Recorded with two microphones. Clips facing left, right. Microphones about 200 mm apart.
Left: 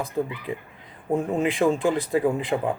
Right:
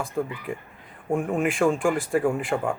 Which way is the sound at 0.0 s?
20° left (ahead or behind).